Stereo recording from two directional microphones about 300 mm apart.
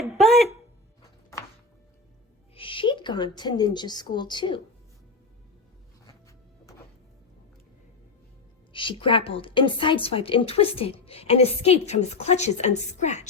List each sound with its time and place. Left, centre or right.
0.0 s a sound: centre
2.6 s speech: centre
8.7 s a woman's voice: centre